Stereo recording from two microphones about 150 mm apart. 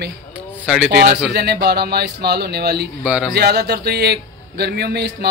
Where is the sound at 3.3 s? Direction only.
90° right.